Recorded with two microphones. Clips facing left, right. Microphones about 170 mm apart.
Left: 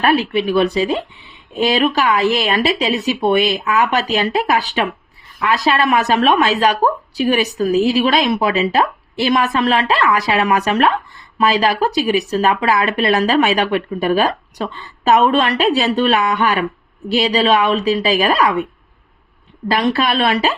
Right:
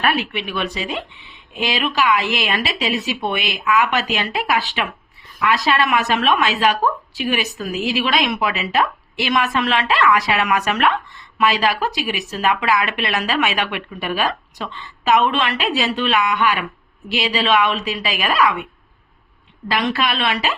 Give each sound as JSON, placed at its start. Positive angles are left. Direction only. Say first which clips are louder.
{"t": 0.0, "sound": "speech", "louder": "left 6 dB", "side_deg": 30}
{"t": 19.7, "sound": "speech", "louder": "left 4 dB", "side_deg": 35}